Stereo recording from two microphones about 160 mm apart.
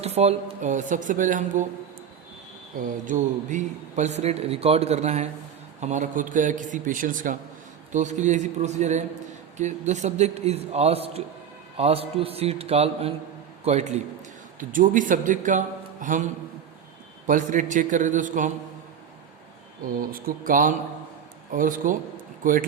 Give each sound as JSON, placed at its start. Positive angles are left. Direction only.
{"t": 0.0, "sound": "a man's voice", "side_deg": -40}
{"t": 2.8, "sound": "a man's voice", "side_deg": -50}
{"t": 14.6, "sound": "a man's voice", "side_deg": -55}
{"t": 20.0, "sound": "a man's voice", "side_deg": -65}